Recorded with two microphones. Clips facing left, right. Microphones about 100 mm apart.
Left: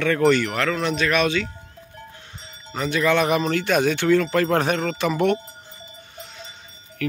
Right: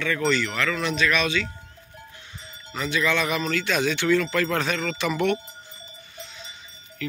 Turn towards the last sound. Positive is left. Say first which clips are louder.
# left 5 dB
turn(degrees=50)  # may be behind; listen again after turning